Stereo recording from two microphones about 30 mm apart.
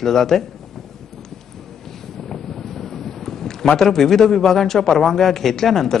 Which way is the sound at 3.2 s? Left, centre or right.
Centre.